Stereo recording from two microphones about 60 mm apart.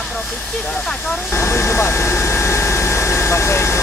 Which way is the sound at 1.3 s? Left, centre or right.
Left.